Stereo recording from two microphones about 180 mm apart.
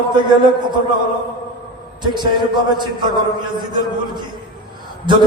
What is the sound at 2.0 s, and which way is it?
A man's voice, 25° right (ahead or behind).